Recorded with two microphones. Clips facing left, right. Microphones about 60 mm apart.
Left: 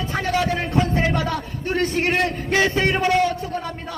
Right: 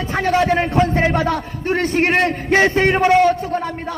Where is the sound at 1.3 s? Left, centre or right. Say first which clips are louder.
Right 5 dB; right.